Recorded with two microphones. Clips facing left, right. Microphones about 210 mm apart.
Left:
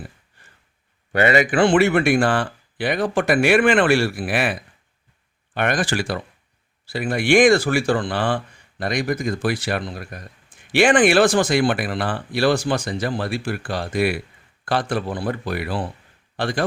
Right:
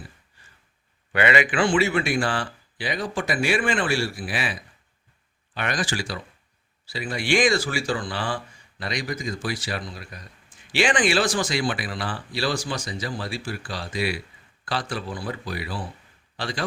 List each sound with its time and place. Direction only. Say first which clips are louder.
1.1 s a man's voice: left 5 dB; 45° left (ahead or behind)
1.6 s a man's voice: left 6 dB; 60° left (ahead or behind)